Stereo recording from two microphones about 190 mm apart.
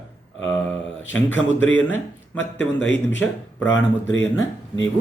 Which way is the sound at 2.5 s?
70° left (ahead or behind).